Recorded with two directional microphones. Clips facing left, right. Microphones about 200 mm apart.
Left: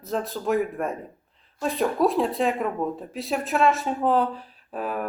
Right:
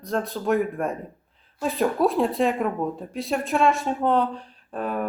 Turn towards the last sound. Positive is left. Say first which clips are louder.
# right 2 dB
turn(degrees=5)  # may be behind; listen again after turning